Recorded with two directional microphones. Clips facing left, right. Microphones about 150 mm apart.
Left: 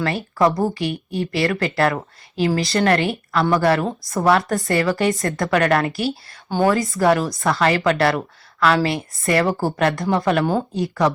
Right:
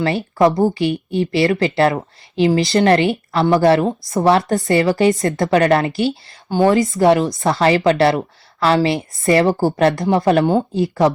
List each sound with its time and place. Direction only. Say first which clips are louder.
0.4 s a woman's voice: right 4 dB; 25° right (ahead or behind)